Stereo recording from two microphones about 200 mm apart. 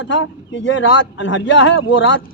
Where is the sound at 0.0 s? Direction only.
65° left (ahead or behind).